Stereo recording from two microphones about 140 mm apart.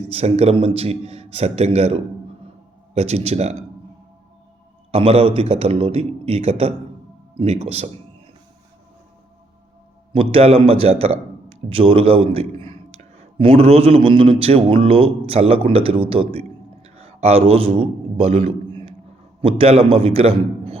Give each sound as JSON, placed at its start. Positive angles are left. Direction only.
{"t": 0.1, "sound": "a man's voice", "side_deg": -45}
{"t": 4.9, "sound": "a man's voice", "side_deg": -45}
{"t": 10.1, "sound": "a man's voice", "side_deg": -45}